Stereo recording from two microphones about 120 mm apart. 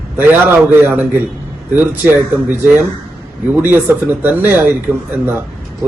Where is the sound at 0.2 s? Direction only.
15° right (ahead or behind).